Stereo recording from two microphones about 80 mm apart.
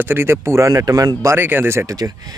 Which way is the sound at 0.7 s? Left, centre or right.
Right.